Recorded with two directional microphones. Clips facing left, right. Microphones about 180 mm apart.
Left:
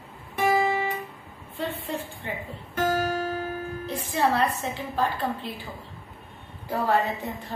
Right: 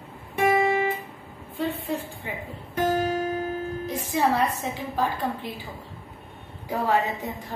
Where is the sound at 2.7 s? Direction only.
20° right (ahead or behind).